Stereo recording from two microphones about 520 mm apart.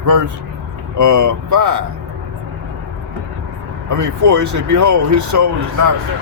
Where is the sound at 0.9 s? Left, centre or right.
Right.